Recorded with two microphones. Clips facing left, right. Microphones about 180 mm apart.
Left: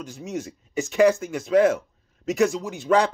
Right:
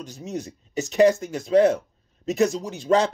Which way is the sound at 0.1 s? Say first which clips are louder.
Even; 40° right (ahead or behind).